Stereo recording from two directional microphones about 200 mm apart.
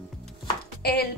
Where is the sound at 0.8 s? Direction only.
55° left (ahead or behind).